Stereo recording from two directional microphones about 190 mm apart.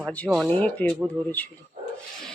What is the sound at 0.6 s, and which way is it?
Speech, 10° left (ahead or behind).